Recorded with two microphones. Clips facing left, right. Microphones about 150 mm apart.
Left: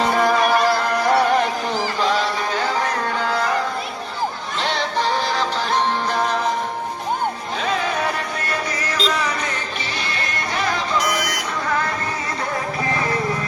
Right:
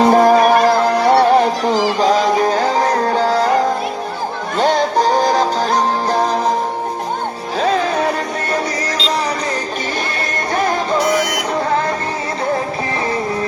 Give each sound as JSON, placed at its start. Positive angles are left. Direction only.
{"t": 0.0, "sound": "music", "side_deg": -40}
{"t": 0.9, "sound": "music", "side_deg": -30}
{"t": 1.7, "sound": "music", "side_deg": -90}
{"t": 2.0, "sound": "music", "side_deg": -40}
{"t": 9.0, "sound": "music", "side_deg": -35}
{"t": 10.5, "sound": "music", "side_deg": -45}
{"t": 10.9, "sound": "music", "side_deg": -25}